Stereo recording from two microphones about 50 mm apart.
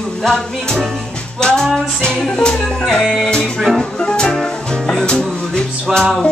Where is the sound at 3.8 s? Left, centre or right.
Centre.